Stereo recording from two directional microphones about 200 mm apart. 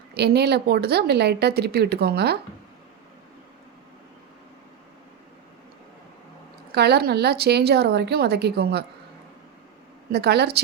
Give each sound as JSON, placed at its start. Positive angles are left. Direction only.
{"t": 0.1, "sound": "a woman's voice", "side_deg": -55}
{"t": 6.7, "sound": "a woman's voice", "side_deg": -55}
{"t": 10.1, "sound": "a woman's voice", "side_deg": -55}